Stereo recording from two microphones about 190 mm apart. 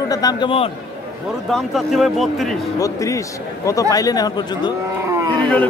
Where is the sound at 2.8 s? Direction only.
15° left (ahead or behind).